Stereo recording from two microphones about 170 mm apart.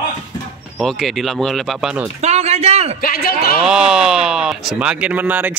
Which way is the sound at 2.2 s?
40° right (ahead or behind).